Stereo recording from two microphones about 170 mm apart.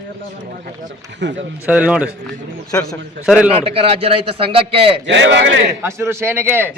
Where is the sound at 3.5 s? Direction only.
35° right (ahead or behind).